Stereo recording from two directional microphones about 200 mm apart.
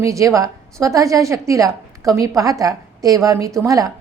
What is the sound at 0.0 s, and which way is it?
A woman's voice, 15° right (ahead or behind).